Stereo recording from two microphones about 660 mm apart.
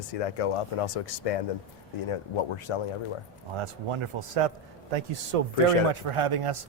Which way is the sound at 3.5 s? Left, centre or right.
Right.